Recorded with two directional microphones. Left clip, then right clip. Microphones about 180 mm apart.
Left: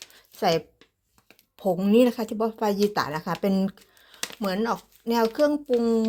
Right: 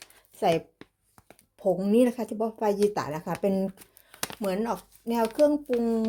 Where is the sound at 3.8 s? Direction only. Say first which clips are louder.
Left 1 dB; 75° right (ahead or behind).